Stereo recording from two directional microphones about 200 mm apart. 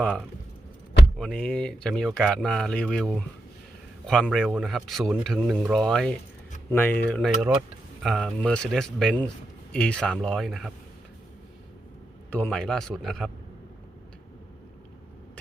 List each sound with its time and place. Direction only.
0.0 s speech: 5° left (ahead or behind)
12.3 s speech: 5° left (ahead or behind)